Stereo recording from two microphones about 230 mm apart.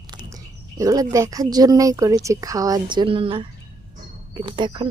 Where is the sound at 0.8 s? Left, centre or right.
Centre.